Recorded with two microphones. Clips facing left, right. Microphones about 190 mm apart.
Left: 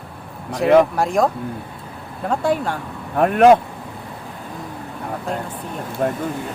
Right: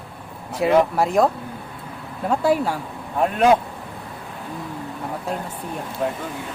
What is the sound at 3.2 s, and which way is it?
Speech, 60° left (ahead or behind).